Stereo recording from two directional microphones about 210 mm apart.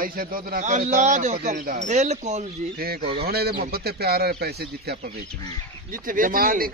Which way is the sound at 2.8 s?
45° right (ahead or behind).